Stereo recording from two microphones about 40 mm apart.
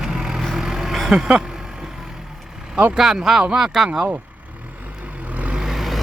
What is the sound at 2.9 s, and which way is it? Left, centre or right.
Speech, centre.